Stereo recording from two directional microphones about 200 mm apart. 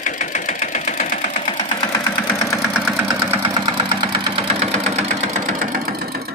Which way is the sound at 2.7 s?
5° right (ahead or behind).